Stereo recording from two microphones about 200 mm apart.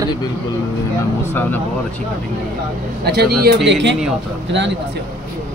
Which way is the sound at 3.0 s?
50° right (ahead or behind).